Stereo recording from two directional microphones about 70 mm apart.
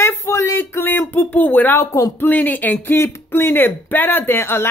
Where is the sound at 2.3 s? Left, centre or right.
Left.